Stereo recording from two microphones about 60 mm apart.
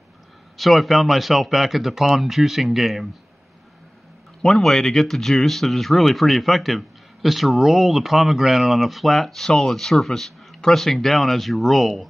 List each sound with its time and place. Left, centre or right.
0.6 s speech: centre
4.5 s speech: centre